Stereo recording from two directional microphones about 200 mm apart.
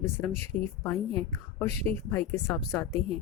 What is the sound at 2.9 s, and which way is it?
Speech, 30° right (ahead or behind).